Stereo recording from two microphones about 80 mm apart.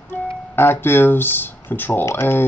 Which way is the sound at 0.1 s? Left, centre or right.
Left.